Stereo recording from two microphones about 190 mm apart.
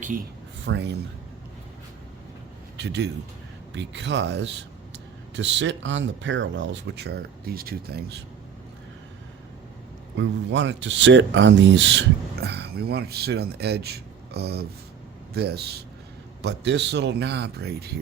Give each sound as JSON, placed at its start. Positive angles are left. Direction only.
{"t": 0.6, "sound": "speech", "side_deg": -65}
{"t": 2.7, "sound": "a man's voice", "side_deg": -65}
{"t": 10.2, "sound": "speech", "side_deg": -70}